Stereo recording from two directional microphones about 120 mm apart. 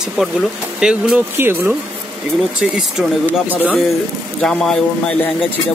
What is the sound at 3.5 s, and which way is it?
Speech, 15° right (ahead or behind).